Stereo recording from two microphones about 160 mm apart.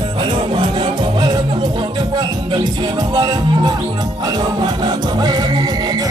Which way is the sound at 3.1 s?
25° right (ahead or behind).